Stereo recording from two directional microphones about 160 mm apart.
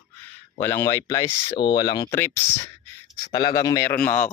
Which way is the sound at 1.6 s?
30° left (ahead or behind).